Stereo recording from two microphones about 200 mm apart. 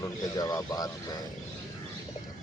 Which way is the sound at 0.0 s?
15° left (ahead or behind).